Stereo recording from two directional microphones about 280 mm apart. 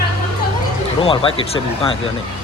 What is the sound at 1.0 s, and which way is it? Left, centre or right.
Speech, centre.